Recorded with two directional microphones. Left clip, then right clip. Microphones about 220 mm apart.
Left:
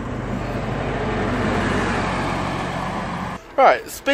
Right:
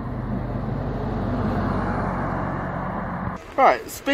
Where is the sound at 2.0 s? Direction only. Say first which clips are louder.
Left 4 dB; 20° left (ahead or behind).